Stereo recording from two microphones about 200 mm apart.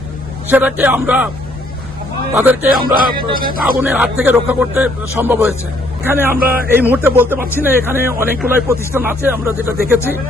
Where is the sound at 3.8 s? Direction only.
5° right (ahead or behind).